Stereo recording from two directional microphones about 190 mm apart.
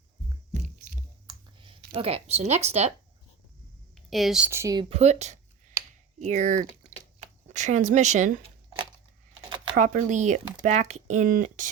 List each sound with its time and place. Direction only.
1.3 s clicking: 25° right (ahead or behind)
2.0 s speech: 30° right (ahead or behind)
3.9 s speech: centre (ahead or behind); by 4.9 s 20° right (ahead or behind)
4.9 s speech: 35° right (ahead or behind)
9.7 s speech: 40° right (ahead or behind)